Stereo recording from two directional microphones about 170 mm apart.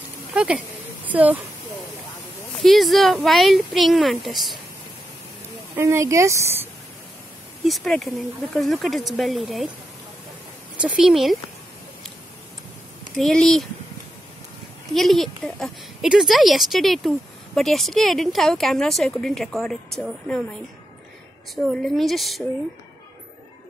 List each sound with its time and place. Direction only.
0.3 s a sound: 5° right (ahead or behind)
1.0 s speech: 10° right (ahead or behind)
2.5 s a woman's voice: centre (ahead or behind)
5.8 s speech: 15° right (ahead or behind)
7.6 s a woman's voice: centre (ahead or behind)
10.8 s a woman's voice: 5° right (ahead or behind)
13.1 s a woman's voice: 5° left (ahead or behind)
15.0 s a woman's voice: centre (ahead or behind)
21.7 s a woman's voice: centre (ahead or behind)